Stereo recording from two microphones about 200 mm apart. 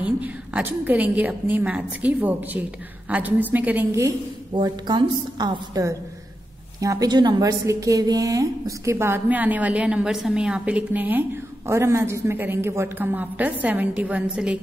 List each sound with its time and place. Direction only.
0.0 s a woman's voice: 5° right (ahead or behind)
4.6 s a woman's voice: 20° right (ahead or behind); by 14.6 s 5° right (ahead or behind)